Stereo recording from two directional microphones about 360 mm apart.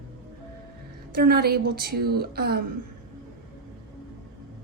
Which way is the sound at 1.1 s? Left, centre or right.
Right.